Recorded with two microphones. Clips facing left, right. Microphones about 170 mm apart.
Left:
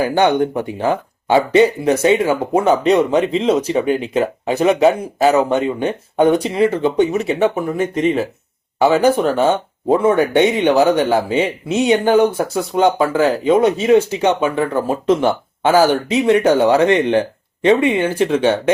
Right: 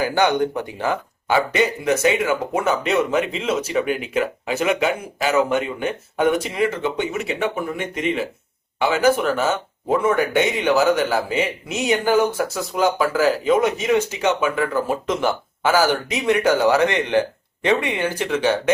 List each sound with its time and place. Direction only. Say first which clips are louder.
0.0 s speech: left 4 dB; 30° left (ahead or behind)